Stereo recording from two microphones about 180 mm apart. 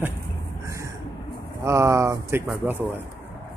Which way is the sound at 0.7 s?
15° right (ahead or behind).